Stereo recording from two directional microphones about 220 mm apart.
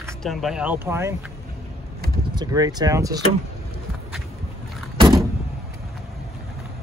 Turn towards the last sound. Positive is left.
turn(degrees=-20)  # may be behind; listen again after turning